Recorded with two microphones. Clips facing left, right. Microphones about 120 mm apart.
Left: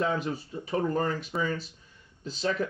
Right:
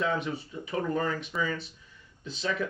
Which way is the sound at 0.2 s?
40° left (ahead or behind).